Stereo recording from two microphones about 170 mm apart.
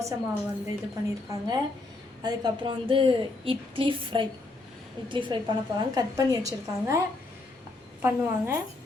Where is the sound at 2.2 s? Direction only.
25° right (ahead or behind).